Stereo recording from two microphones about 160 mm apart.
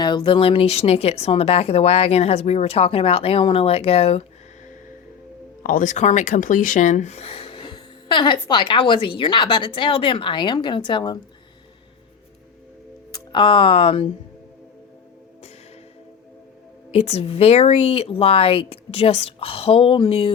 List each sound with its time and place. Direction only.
0.0 s speech: 30° left (ahead or behind)
5.6 s speech: 55° left (ahead or behind); by 11.2 s 30° left (ahead or behind)
13.1 s speech: 30° left (ahead or behind)
16.9 s speech: 40° left (ahead or behind)